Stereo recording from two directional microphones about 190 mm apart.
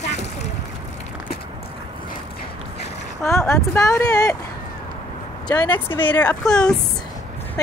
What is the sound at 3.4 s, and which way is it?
Speech, 15° left (ahead or behind).